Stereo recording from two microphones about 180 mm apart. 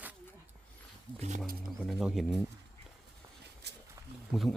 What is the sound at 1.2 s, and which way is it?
Speech, 40° right (ahead or behind).